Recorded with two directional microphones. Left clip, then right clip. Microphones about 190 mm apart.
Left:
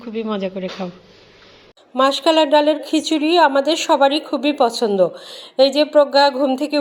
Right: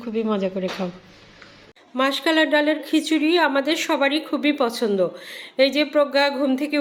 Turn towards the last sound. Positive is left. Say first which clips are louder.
# left 5 dB
turn(degrees=10)  # may be behind; listen again after turning